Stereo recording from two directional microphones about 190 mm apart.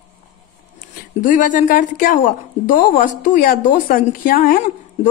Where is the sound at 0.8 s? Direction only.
45° left (ahead or behind).